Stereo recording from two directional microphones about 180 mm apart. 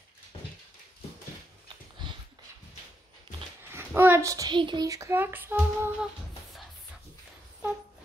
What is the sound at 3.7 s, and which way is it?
Speech, 10° right (ahead or behind).